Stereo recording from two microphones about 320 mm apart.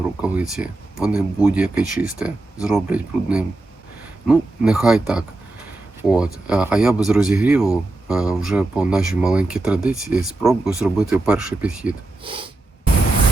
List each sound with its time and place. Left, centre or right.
0.2 s speech: centre
12.2 s snort: centre